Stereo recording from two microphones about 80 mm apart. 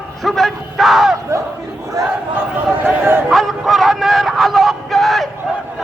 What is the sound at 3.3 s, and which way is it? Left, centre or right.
Vehicle, centre.